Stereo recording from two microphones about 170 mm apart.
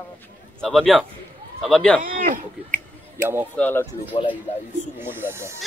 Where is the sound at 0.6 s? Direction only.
Centre (ahead or behind).